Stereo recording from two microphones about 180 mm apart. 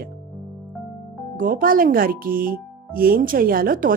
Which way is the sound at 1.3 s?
50° right (ahead or behind).